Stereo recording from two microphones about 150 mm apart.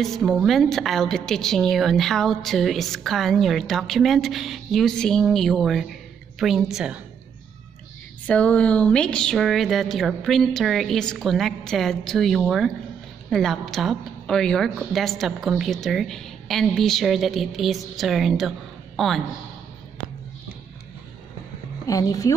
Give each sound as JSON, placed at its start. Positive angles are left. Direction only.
{"t": 0.0, "sound": "a woman's voice", "side_deg": 0}
{"t": 8.3, "sound": "a woman's voice", "side_deg": 10}
{"t": 21.8, "sound": "speech", "side_deg": 25}